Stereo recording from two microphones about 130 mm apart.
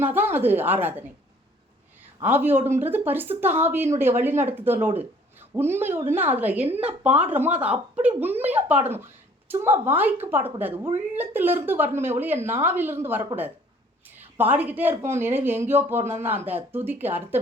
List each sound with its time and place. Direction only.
0.0 s speech: 15° right (ahead or behind)
2.2 s speech: 15° right (ahead or behind)